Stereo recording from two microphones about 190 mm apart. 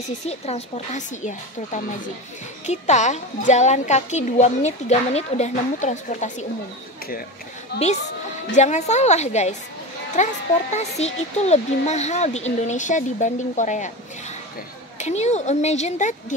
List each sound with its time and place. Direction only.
0.3 s a woman's voice: 35° left (ahead or behind)
7.7 s a woman's voice: 60° left (ahead or behind)
8.5 s a woman's voice: 40° left (ahead or behind)
15.0 s a woman's voice: 35° left (ahead or behind)